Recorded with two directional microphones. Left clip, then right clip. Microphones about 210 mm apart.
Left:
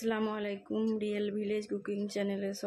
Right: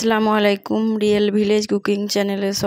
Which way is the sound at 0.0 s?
40° right (ahead or behind).